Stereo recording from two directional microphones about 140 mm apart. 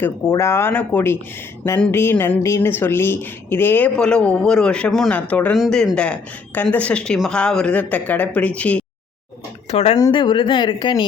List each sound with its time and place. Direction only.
0.0 s speech: 20° left (ahead or behind)
9.6 s speech: 50° left (ahead or behind)
10.0 s speech: 35° left (ahead or behind)